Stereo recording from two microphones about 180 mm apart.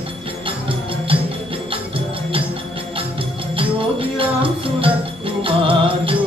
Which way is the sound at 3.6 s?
30° right (ahead or behind).